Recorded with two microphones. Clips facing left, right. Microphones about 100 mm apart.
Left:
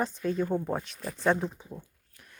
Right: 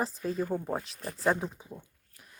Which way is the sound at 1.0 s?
35° right (ahead or behind).